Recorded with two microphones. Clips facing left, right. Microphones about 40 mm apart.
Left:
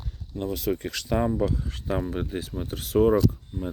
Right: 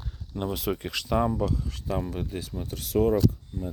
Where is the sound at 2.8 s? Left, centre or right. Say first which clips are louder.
Left 3 dB; centre.